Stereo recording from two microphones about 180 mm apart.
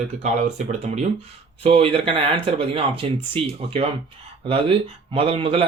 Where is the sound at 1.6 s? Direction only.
35° right (ahead or behind).